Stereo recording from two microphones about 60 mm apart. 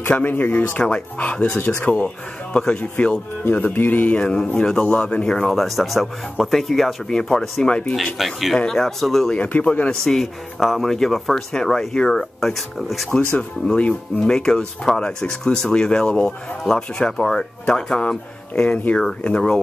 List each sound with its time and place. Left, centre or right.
0.2 s speech: left
0.8 s speech: centre
2.5 s speech: centre
3.5 s speech: left
4.2 s speech: centre
5.5 s speech: centre
7.9 s speech: centre
8.5 s speech: centre
9.4 s speech: left
9.8 s speech: centre
13.1 s speech: centre